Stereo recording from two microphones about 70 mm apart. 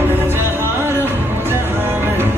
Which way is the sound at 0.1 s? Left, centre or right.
Right.